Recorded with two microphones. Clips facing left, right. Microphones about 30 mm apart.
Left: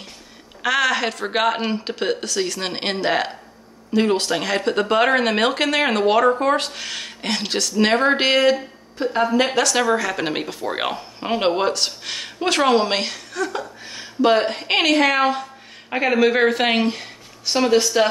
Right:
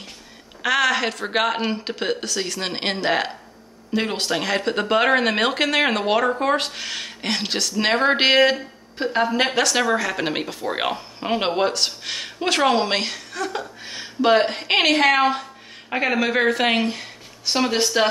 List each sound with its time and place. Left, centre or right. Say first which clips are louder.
0.6 s a woman's voice: even; centre; by 9.1 s right
9.5 s a woman's voice: left 1 dB; centre